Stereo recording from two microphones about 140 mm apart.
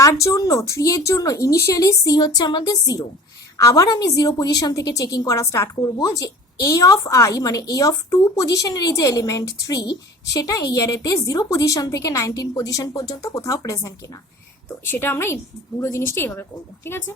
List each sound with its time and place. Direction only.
0.0 s a woman's voice: 20° left (ahead or behind)